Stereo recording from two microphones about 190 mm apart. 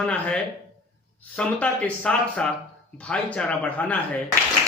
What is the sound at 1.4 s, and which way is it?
A man's voice, 5° left (ahead or behind).